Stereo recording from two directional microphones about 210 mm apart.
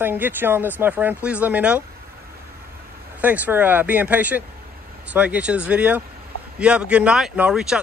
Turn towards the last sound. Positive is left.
turn(degrees=-5)  # may be behind; listen again after turning